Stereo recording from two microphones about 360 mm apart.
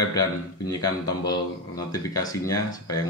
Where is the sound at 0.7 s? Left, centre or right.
Centre.